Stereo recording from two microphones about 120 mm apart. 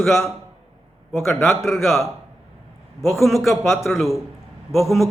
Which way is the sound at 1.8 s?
20° left (ahead or behind).